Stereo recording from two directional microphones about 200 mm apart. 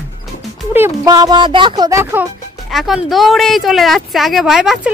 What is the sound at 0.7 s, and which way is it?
Speech, 15° right (ahead or behind).